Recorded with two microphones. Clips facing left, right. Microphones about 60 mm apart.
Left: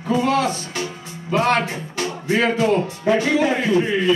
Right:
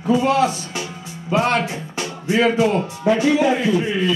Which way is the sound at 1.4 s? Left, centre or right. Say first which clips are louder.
Even; left.